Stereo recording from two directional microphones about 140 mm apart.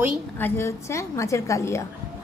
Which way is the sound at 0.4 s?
20° left (ahead or behind).